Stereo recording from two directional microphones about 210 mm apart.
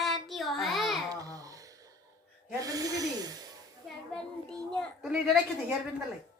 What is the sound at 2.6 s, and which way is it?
Speech, 15° right (ahead or behind).